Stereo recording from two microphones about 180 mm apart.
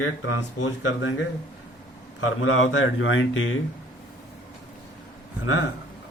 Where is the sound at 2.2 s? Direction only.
90° left.